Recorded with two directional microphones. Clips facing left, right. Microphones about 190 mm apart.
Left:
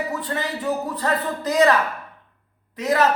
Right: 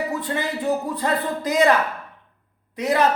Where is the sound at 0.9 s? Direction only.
15° right (ahead or behind).